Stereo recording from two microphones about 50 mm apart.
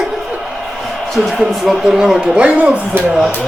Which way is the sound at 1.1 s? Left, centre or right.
Centre.